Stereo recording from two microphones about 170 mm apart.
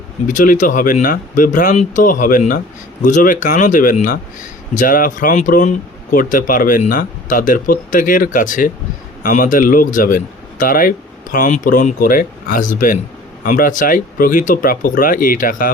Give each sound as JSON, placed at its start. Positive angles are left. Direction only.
{"t": 0.3, "sound": "speech", "side_deg": 50}